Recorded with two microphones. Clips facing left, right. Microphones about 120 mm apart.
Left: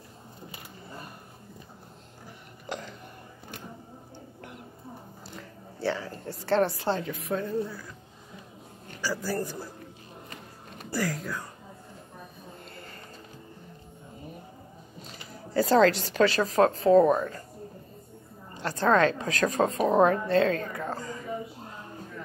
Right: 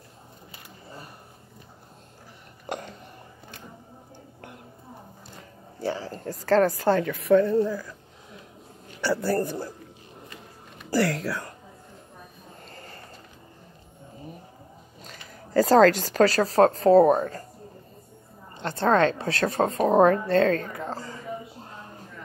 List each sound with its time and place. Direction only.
5.9 s speech: 35° right (ahead or behind)
7.0 s a woman's voice: 60° right (ahead or behind); by 7.8 s 90° right
9.0 s a man's voice: 65° right (ahead or behind)
10.9 s speech: 80° right
15.0 s speech: 40° right (ahead or behind)
18.6 s a woman's voice: 30° right (ahead or behind)
20.7 s a sound: 30° right (ahead or behind)